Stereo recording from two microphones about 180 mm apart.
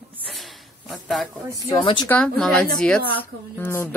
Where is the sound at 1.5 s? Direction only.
25° left (ahead or behind).